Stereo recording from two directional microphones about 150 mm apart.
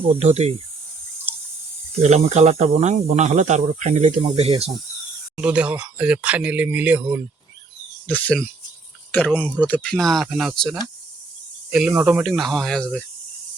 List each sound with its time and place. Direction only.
0.2 s speech: 45° right (ahead or behind)
1.3 s a sound: 15° right (ahead or behind)
2.0 s speech: 45° right (ahead or behind)
5.4 s speech: 10° right (ahead or behind)
8.0 s speech: 10° left (ahead or behind)